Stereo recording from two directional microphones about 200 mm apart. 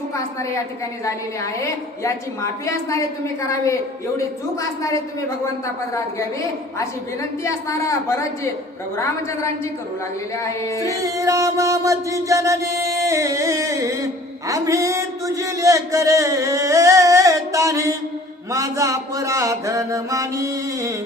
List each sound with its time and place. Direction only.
1.0 s a woman's voice: 15° left (ahead or behind)
7.4 s a woman's voice: 15° left (ahead or behind)
10.3 s a woman's voice: 15° left (ahead or behind)
10.8 s music: 15° right (ahead or behind)
18.5 s mantra: 15° right (ahead or behind)